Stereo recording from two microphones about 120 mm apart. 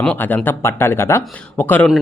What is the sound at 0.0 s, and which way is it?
Speech, 10° left (ahead or behind).